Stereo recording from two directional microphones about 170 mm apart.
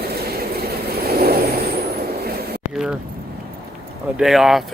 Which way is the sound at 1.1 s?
65° right (ahead or behind).